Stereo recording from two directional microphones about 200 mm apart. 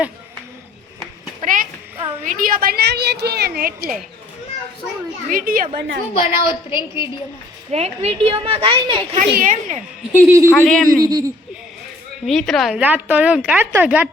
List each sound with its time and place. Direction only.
1.4 s a sound: 40° right (ahead or behind)
2.2 s a woman's voice: 40° right (ahead or behind)
5.3 s a woman's voice: 45° right (ahead or behind)
6.1 s a woman's voice: 25° left (ahead or behind)
7.7 s a woman's voice: 30° right (ahead or behind)
9.3 s speech: 40° right (ahead or behind)
10.2 s a woman's voice: 15° right (ahead or behind)
10.5 s speech: 5° left (ahead or behind)
11.0 s a woman's voice: 20° right (ahead or behind)
12.2 s a woman's voice: centre (ahead or behind)